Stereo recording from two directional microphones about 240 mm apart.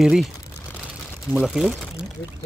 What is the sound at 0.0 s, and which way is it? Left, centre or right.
Speech, centre.